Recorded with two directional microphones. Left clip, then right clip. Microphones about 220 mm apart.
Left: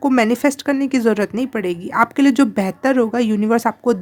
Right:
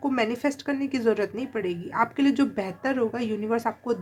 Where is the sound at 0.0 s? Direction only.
50° left (ahead or behind).